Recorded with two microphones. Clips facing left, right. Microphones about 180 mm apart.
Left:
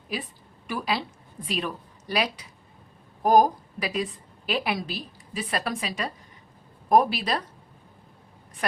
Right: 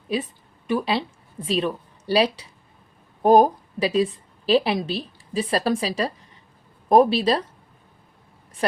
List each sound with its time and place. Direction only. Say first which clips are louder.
0.7 s a woman's voice: right 6 dB; 25° right (ahead or behind)